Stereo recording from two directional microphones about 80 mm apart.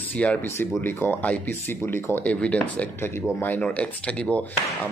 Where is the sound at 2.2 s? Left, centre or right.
Centre.